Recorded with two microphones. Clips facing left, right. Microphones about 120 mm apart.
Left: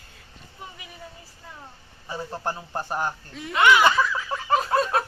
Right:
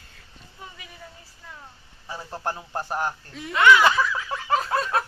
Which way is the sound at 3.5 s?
20° left (ahead or behind).